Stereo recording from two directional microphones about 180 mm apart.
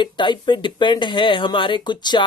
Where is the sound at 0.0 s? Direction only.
25° left (ahead or behind).